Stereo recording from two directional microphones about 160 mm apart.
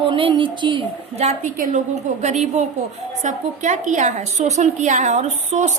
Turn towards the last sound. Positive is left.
turn(degrees=-45)  # may be behind; listen again after turning